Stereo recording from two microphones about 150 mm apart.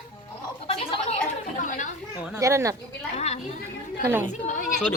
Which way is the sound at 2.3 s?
20° right (ahead or behind).